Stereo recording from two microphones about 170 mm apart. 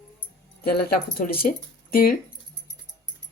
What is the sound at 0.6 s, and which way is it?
Speech, 65° left (ahead or behind).